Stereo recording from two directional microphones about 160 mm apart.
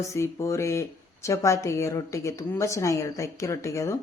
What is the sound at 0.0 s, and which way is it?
Speech, 15° left (ahead or behind).